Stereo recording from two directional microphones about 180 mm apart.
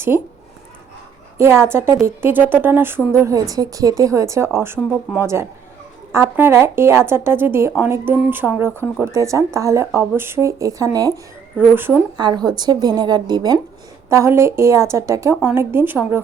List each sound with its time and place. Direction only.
1.4 s a woman's voice: 15° right (ahead or behind)
12.1 s a woman's voice: 25° right (ahead or behind)